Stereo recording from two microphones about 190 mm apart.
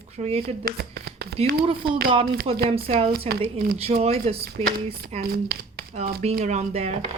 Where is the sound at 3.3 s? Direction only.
35° right (ahead or behind).